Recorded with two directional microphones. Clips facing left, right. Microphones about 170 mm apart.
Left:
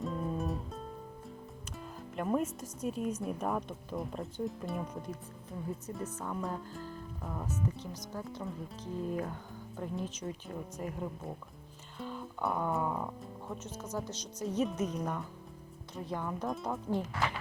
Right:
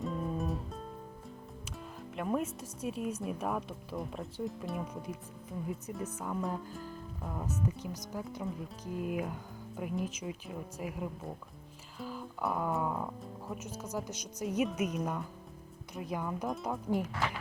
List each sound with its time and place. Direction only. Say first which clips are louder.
0.0 s music: even; centre (ahead or behind)
2.1 s speech: left 1 dB; centre (ahead or behind)
6.7 s music: even; 10° right (ahead or behind)
7.9 s speech: right 1 dB; 15° right (ahead or behind)
13.6 s speech: even; 10° right (ahead or behind)